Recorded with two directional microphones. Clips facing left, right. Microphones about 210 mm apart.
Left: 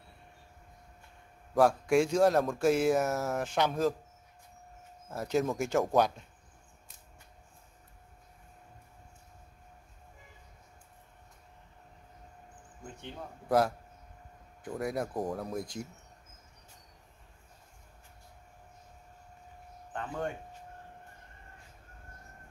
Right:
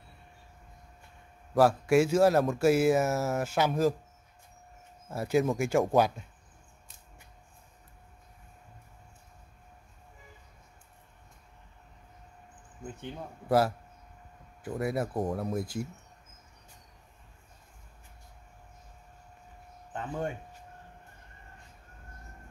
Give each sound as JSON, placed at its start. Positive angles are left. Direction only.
{"t": 1.5, "sound": "speech", "side_deg": -5}
{"t": 5.1, "sound": "speech", "side_deg": -5}
{"t": 13.5, "sound": "speech", "side_deg": -5}
{"t": 19.9, "sound": "speech", "side_deg": -20}